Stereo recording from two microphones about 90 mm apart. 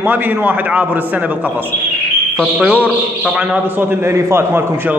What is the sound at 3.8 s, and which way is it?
A man's voice, 30° right (ahead or behind).